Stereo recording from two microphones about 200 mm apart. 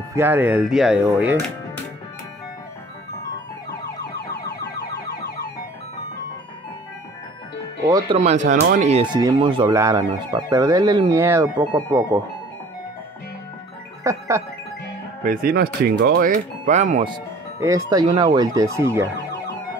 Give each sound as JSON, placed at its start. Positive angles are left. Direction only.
{"t": 0.1, "sound": "speech", "side_deg": -10}
{"t": 7.8, "sound": "speech", "side_deg": -20}
{"t": 8.2, "sound": "speech", "side_deg": -35}
{"t": 14.0, "sound": "speech", "side_deg": -15}
{"t": 15.2, "sound": "speech", "side_deg": -45}
{"t": 17.6, "sound": "speech", "side_deg": -15}
{"t": 18.2, "sound": "ambulance", "side_deg": -20}